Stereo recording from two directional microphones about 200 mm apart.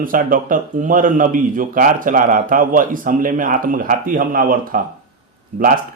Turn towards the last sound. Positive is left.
turn(degrees=-40)  # may be behind; listen again after turning